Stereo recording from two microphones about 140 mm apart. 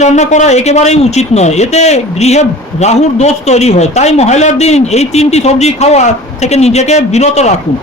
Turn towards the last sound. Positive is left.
turn(degrees=50)  # may be behind; listen again after turning